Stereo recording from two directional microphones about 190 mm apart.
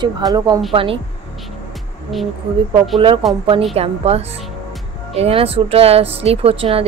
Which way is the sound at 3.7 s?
30° right (ahead or behind).